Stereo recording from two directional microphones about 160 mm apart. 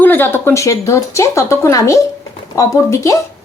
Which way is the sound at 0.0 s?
15° left (ahead or behind).